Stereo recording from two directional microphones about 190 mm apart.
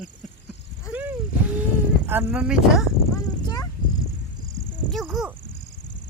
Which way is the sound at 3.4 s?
20° left (ahead or behind).